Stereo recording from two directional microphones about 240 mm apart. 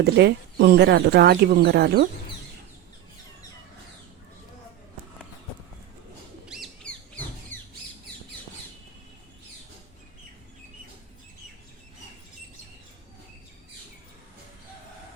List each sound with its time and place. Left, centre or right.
0.0 s speech: right
6.5 s bird: centre
7.5 s squawk: centre